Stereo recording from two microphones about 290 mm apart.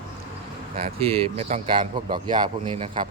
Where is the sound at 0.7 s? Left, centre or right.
Right.